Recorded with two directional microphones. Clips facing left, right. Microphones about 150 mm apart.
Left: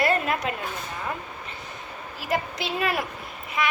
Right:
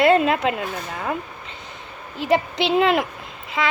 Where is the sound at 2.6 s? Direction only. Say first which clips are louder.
Right 9 dB; 20° right (ahead or behind).